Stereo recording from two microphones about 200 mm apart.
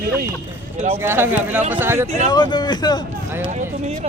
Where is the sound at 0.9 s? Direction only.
10° right (ahead or behind).